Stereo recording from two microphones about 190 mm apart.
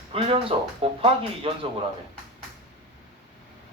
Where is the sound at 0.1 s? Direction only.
30° right (ahead or behind).